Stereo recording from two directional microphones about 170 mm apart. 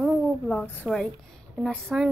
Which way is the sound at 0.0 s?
5° left (ahead or behind).